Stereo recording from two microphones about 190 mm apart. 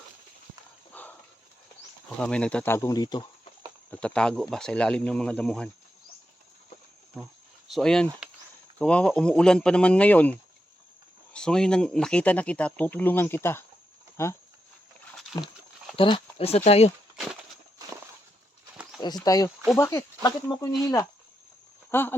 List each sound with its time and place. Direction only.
0.9 s horse: 10° left (ahead or behind)
2.0 s speech: 5° left (ahead or behind); by 3.2 s 20° left (ahead or behind)
3.9 s speech: 5° left (ahead or behind)
7.7 s speech: centre (ahead or behind)
11.3 s speech: 5° left (ahead or behind)
15.3 s speech: 25° left (ahead or behind)
19.2 s speech: 20° left (ahead or behind)
21.8 s speech: 10° left (ahead or behind)